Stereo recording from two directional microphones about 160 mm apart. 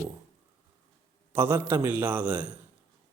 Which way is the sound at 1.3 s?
15° right (ahead or behind).